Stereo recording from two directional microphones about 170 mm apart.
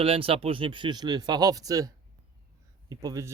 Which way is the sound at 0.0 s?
35° right (ahead or behind).